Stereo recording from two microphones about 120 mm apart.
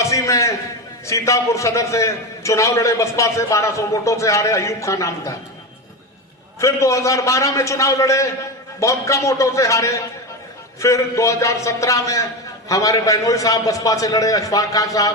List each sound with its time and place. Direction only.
0.0 s a sound: 25° left (ahead or behind)
1.0 s a man's voice: 25° left (ahead or behind)
6.6 s a man's voice: 25° left (ahead or behind)